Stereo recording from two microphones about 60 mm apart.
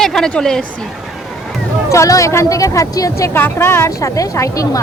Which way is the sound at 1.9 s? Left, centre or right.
Left.